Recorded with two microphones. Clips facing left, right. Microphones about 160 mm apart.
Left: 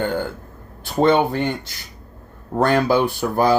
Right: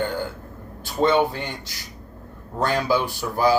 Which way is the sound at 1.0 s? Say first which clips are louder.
Left 3 dB; 55° left (ahead or behind).